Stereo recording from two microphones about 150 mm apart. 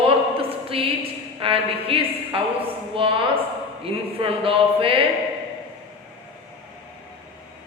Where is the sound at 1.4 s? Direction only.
35° right (ahead or behind).